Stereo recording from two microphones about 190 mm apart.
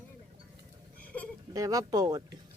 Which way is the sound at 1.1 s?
10° left (ahead or behind).